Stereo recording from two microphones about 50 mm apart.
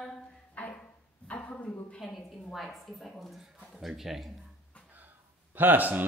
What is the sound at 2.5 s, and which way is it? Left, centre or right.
Speech, centre.